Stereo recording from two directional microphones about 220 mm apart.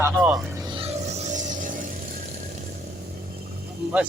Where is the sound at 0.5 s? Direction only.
20° right (ahead or behind); by 1.8 s 35° right (ahead or behind).